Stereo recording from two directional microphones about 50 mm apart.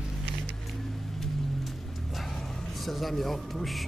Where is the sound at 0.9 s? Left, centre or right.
Centre.